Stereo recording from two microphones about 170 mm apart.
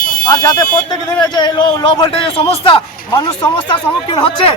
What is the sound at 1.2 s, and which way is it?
A man's voice, 25° left (ahead or behind).